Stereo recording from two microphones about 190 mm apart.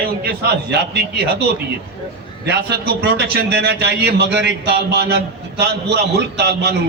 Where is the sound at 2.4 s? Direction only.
60° right (ahead or behind).